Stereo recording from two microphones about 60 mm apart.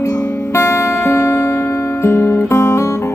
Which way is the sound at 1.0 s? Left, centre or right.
Left.